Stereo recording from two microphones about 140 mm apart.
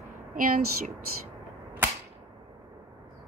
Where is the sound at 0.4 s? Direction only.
75° right (ahead or behind).